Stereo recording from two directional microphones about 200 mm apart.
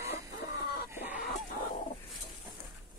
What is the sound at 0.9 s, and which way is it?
Chicken, 10° right (ahead or behind).